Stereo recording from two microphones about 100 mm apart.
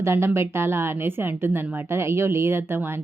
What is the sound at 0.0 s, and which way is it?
A woman's voice, 25° right (ahead or behind).